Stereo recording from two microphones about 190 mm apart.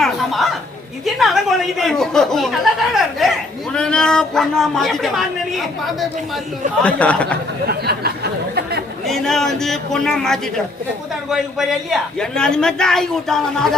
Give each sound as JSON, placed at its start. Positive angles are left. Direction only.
{"t": 0.0, "sound": "a sound", "side_deg": 0}
{"t": 1.0, "sound": "speech", "side_deg": 0}
{"t": 7.7, "sound": "speech", "side_deg": -55}
{"t": 9.0, "sound": "speech", "side_deg": 0}